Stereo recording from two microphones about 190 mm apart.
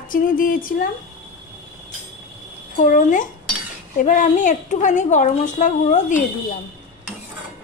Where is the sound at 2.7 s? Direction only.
45° left (ahead or behind).